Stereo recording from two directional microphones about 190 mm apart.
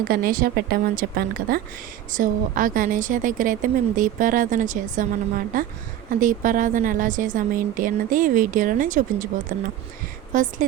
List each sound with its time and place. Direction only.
0.0 s a woman's voice: 50° right (ahead or behind)